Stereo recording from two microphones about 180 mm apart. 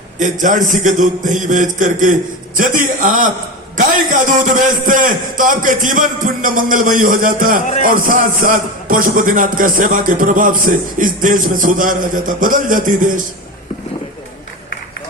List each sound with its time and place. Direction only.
0.2 s a man's voice: 45° right (ahead or behind)
4.3 s a man's voice: 45° right (ahead or behind)